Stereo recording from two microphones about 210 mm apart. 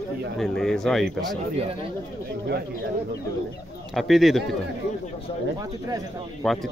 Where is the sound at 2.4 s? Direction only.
55° right (ahead or behind).